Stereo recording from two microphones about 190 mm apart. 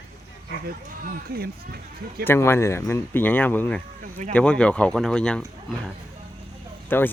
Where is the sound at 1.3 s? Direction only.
55° right (ahead or behind).